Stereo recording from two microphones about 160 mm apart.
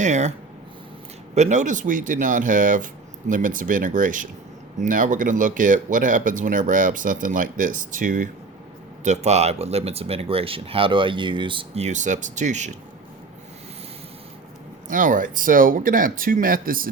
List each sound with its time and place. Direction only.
0.0 s speech: 45° right (ahead or behind)
1.4 s speech: 50° right (ahead or behind)
9.0 s speech: 45° right (ahead or behind)
14.8 s speech: 55° right (ahead or behind)